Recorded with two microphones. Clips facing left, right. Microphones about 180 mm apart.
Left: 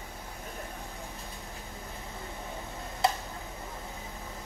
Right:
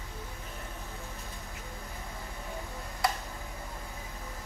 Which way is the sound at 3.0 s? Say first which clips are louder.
Left 3 dB; 25° left (ahead or behind).